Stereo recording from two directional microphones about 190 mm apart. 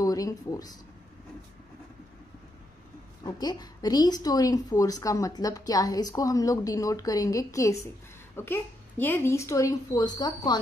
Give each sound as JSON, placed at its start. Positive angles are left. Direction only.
{"t": 0.0, "sound": "speech", "side_deg": 20}
{"t": 3.3, "sound": "a woman's voice", "side_deg": 20}